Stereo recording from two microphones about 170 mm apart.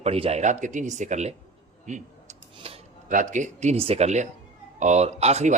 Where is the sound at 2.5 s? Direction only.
35° right (ahead or behind).